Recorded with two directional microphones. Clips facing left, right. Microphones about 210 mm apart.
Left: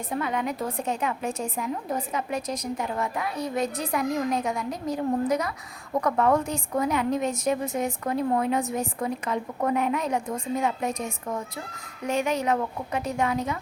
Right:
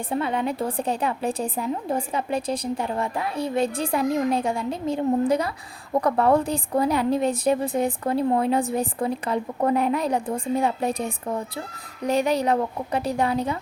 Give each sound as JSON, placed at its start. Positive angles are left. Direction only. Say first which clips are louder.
{"t": 0.1, "sound": "a woman's voice", "louder": "right 3 dB", "side_deg": -30}